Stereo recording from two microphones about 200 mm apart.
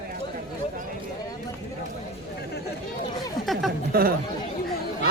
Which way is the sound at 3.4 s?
Centre (ahead or behind).